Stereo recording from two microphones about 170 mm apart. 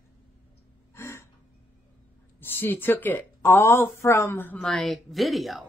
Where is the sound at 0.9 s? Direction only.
15° left (ahead or behind).